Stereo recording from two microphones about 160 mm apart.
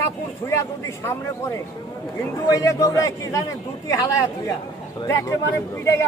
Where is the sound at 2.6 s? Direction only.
20° left (ahead or behind).